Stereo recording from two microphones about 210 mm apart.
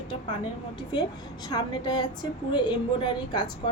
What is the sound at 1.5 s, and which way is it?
A woman's voice, 20° left (ahead or behind).